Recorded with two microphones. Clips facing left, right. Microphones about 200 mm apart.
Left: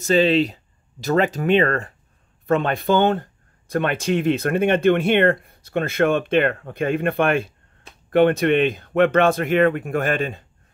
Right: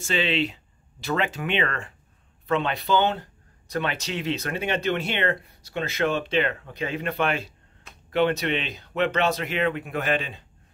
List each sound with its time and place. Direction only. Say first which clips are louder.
0.0 s speech: left 8 dB; 40° left (ahead or behind)